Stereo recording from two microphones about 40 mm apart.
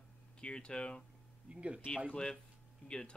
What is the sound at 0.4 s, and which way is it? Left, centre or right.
Speech, left.